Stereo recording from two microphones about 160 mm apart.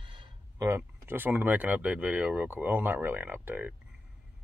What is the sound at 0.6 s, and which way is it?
Speech, 15° right (ahead or behind).